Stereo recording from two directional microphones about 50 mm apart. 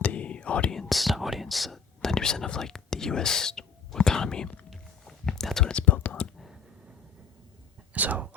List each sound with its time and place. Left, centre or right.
0.0 s whispering: left
0.7 s whispering: centre
5.0 s a sound: centre
5.8 s speech: left
7.9 s speech: right